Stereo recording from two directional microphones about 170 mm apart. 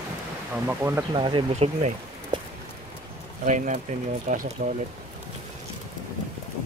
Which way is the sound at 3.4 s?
45° right (ahead or behind).